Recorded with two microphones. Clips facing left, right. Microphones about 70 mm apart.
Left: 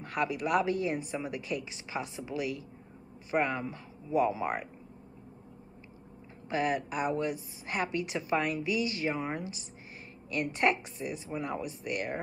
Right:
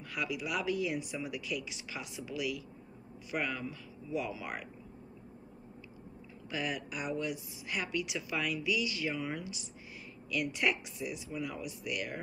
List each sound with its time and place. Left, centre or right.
0.0 s a woman's voice: left
6.5 s a woman's voice: left